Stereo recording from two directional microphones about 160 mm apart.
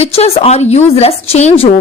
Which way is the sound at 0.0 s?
40° left (ahead or behind).